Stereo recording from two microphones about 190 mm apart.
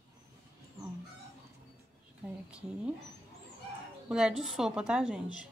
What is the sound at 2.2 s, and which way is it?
Speech, 5° right (ahead or behind).